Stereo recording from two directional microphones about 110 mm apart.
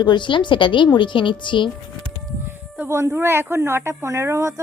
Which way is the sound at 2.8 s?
25° right (ahead or behind).